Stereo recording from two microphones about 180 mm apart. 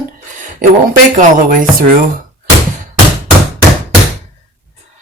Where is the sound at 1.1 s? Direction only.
50° right (ahead or behind).